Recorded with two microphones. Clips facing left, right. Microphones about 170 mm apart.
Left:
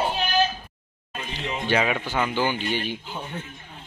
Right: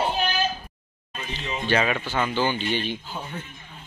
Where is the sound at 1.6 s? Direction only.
10° left (ahead or behind).